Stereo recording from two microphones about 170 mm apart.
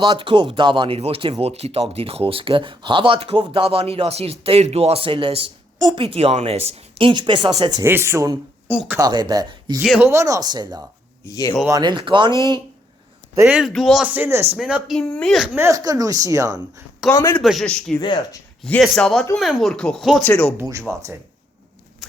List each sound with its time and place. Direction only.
0.0 s speech: 30° right (ahead or behind)
7.9 s speech: 15° right (ahead or behind)
9.0 s speech: 25° right (ahead or behind)
9.8 s speech: 5° right (ahead or behind)
10.1 s speech: 20° right (ahead or behind)
11.3 s speech: 20° left (ahead or behind)
11.8 s speech: 30° right (ahead or behind)
13.5 s speech: centre (ahead or behind)
15.5 s speech: 15° right (ahead or behind)
17.1 s a man's voice: 15° left (ahead or behind)
17.4 s speech: centre (ahead or behind)
18.0 s speech: 25° left (ahead or behind)
18.6 s a man's voice: 5° left (ahead or behind)
20.6 s speech: 15° right (ahead or behind)